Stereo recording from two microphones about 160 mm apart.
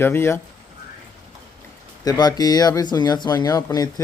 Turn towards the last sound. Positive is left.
turn(degrees=20)  # may be behind; listen again after turning